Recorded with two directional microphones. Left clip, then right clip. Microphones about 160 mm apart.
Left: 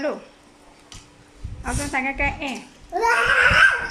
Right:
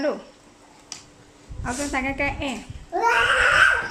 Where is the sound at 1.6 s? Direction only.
15° right (ahead or behind).